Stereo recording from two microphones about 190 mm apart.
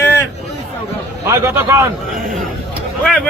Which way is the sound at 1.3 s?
15° right (ahead or behind).